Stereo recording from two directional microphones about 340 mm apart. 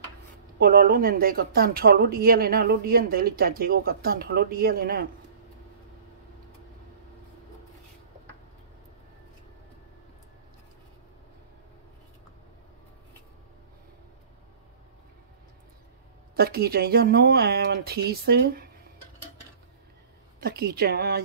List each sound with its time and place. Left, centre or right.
0.6 s speech: right
16.3 s speech: right
20.3 s speech: right